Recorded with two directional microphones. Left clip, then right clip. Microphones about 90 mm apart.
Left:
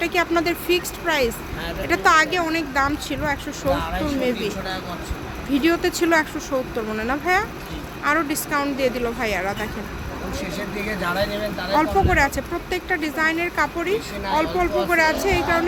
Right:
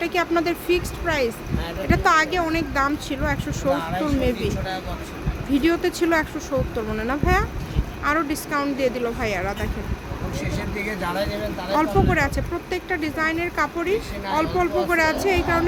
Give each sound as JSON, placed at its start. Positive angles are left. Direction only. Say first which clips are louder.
{"t": 0.0, "sound": "speech", "louder": "left 1 dB", "side_deg": -5}
{"t": 1.0, "sound": "speech", "louder": "left 2 dB", "side_deg": 0}
{"t": 2.5, "sound": "speech", "louder": "left 1 dB", "side_deg": -15}
{"t": 4.0, "sound": "speech", "louder": "even", "side_deg": -20}
{"t": 5.5, "sound": "speech", "louder": "left 1 dB", "side_deg": 0}
{"t": 10.8, "sound": "speech", "louder": "left 3 dB", "side_deg": -40}
{"t": 11.8, "sound": "speech", "louder": "left 2 dB", "side_deg": 0}